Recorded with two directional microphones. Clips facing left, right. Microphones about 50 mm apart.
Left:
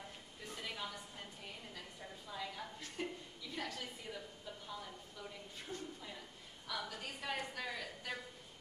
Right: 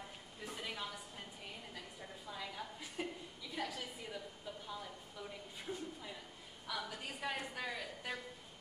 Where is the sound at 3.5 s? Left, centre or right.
Centre.